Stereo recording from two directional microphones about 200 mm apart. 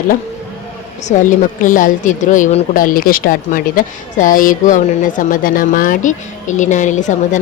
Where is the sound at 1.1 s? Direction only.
40° left (ahead or behind).